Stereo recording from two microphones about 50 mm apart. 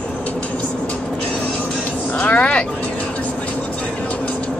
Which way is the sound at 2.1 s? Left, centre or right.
Left.